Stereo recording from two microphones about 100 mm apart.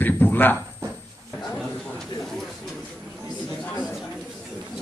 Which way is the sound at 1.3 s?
5° left (ahead or behind).